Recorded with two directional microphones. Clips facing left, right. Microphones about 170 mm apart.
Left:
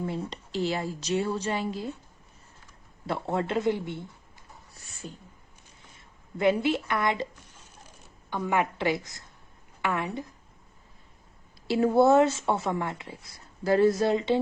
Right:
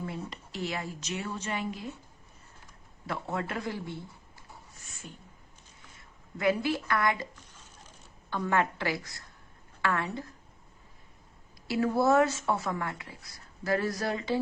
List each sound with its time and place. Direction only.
0.0 s speech: 25° left (ahead or behind)
3.1 s speech: 30° left (ahead or behind)
4.7 s a sound: 35° left (ahead or behind)
5.9 s a woman's voice: 25° left (ahead or behind)
11.7 s speech: 25° left (ahead or behind)